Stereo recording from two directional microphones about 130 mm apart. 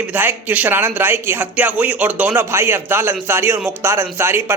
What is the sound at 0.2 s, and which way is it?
A man's voice, 15° right (ahead or behind).